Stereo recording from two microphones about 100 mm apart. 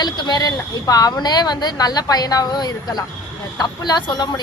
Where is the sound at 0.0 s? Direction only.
45° left (ahead or behind).